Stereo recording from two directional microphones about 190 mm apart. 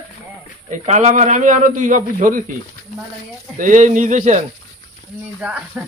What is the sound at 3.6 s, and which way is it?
Speech, 40° right (ahead or behind).